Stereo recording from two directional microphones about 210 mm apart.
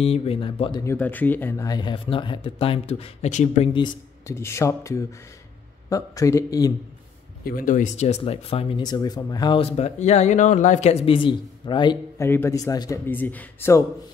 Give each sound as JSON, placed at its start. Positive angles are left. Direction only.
{"t": 0.0, "sound": "speech", "side_deg": 30}
{"t": 3.7, "sound": "a man's voice", "side_deg": 15}
{"t": 7.4, "sound": "a man's voice", "side_deg": 40}